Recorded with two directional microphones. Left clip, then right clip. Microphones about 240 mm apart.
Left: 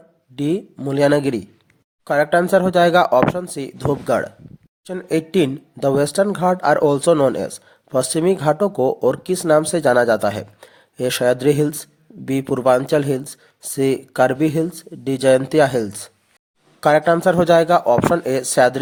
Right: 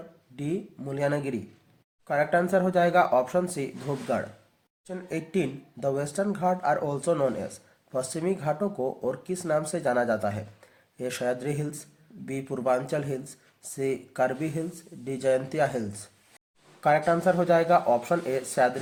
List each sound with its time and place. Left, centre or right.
0.3 s speech: left
4.9 s speech: left